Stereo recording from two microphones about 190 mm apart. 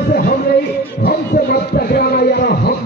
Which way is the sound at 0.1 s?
55° left (ahead or behind).